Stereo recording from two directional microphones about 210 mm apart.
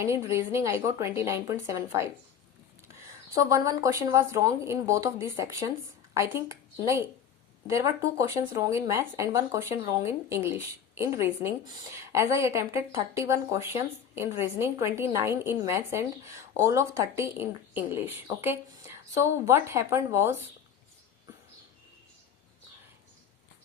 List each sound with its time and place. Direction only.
0.0 s speech: 15° right (ahead or behind)
3.3 s speech: 15° right (ahead or behind)